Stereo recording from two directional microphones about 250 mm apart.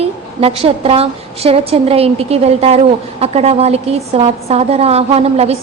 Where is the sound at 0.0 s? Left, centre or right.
Right.